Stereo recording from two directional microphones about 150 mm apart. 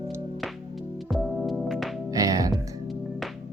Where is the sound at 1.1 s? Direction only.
Centre (ahead or behind).